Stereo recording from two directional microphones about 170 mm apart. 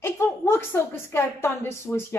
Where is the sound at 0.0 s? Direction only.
15° left (ahead or behind).